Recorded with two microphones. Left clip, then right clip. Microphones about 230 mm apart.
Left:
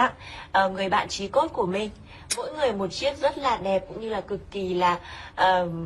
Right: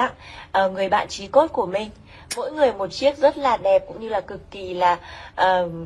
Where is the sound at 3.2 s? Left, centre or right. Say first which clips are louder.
Right 5 dB; centre.